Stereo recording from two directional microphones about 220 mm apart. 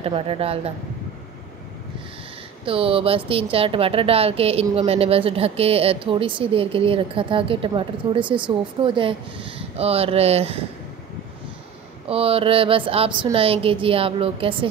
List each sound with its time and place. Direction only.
0.0 s speech: 25° right (ahead or behind)
2.6 s speech: 25° right (ahead or behind)
12.1 s speech: 25° right (ahead or behind)